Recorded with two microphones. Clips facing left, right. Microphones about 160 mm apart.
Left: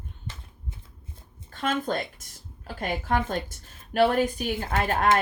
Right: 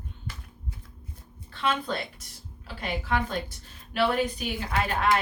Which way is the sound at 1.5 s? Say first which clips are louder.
Left 2 dB; 45° left (ahead or behind).